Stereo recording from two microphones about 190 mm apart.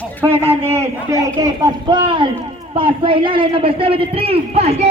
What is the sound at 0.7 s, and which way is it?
A man's voice, 15° right (ahead or behind).